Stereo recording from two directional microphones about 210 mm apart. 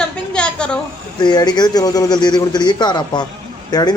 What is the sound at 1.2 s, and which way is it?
Speech, 20° left (ahead or behind).